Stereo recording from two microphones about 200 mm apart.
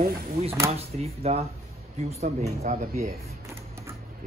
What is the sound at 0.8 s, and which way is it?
Speech, 30° right (ahead or behind).